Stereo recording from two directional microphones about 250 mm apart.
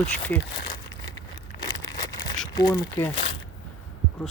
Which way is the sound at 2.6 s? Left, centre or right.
Centre.